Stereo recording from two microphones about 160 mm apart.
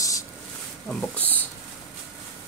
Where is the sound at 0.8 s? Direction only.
10° left (ahead or behind).